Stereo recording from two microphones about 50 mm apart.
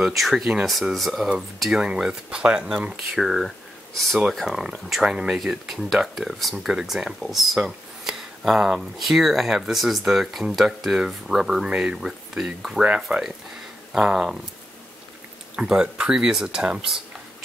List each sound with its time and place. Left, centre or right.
0.1 s speech: centre
1.7 s speech: centre
3.1 s speech: centre
4.3 s speech: centre
5.0 s speech: centre
5.4 s speech: centre
8.0 s a sound: centre
8.9 s speech: centre
12.8 s speech: right
13.9 s speech: centre
15.5 s speech: centre